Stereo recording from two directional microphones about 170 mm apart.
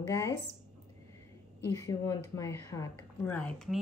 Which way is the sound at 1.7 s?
20° left (ahead or behind).